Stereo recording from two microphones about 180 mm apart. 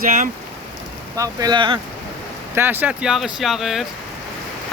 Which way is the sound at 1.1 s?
20° right (ahead or behind).